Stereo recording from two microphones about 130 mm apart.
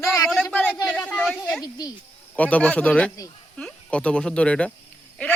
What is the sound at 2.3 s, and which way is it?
Speech, 10° left (ahead or behind).